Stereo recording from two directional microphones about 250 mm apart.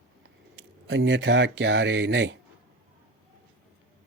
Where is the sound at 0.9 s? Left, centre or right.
Right.